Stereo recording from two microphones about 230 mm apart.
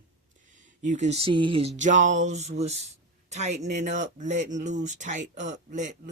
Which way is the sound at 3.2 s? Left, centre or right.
Right.